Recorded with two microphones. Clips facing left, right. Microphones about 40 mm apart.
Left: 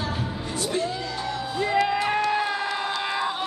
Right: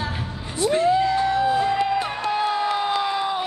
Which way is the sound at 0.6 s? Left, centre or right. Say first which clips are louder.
Right 10 dB; right.